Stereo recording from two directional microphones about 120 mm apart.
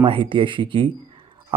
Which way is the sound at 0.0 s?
45° right (ahead or behind).